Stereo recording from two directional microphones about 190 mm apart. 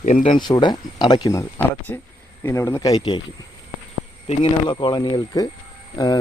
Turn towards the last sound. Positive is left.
turn(degrees=20)  # may be behind; listen again after turning